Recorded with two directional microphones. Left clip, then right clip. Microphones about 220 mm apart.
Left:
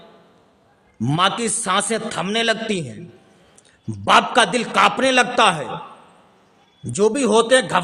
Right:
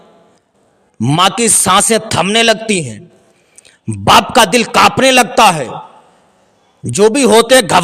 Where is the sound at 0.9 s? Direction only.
35° right (ahead or behind).